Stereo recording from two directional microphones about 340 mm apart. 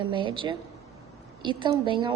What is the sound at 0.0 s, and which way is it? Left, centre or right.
A woman's voice, centre.